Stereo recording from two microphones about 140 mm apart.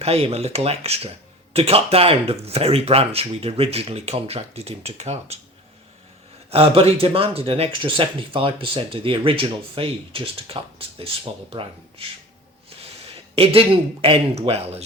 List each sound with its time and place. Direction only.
0.0 s speech: 45° right (ahead or behind)
6.5 s speech: 45° right (ahead or behind)
13.3 s speech: 45° right (ahead or behind)